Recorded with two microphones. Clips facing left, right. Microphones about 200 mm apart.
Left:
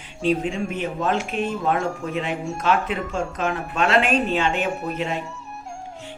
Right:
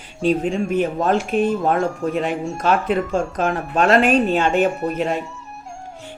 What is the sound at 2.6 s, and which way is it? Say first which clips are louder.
Speech: right 4 dB; 40° right (ahead or behind).